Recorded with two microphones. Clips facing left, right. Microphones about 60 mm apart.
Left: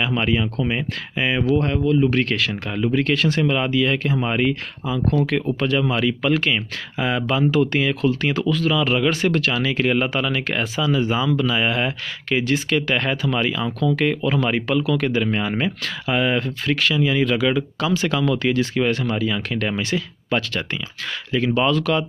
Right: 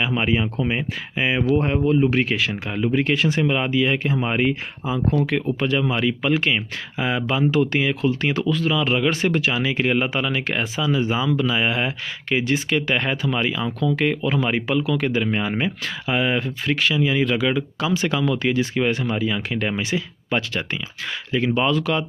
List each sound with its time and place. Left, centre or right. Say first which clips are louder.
0.0 s speech: even; centre